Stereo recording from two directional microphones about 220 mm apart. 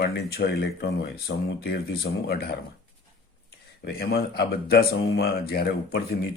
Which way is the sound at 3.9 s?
45° left (ahead or behind).